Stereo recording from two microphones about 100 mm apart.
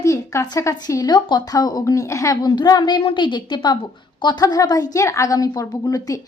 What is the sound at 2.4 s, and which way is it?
Speech, 45° left (ahead or behind).